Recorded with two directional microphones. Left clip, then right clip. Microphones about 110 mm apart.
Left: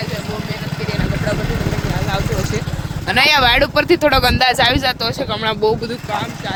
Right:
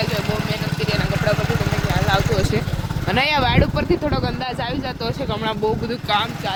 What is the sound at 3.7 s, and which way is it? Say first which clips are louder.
Speech: left 8 dB; 65° left (ahead or behind).